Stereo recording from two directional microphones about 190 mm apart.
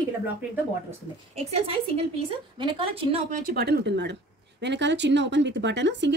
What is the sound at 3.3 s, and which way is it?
Speech, 50° right (ahead or behind).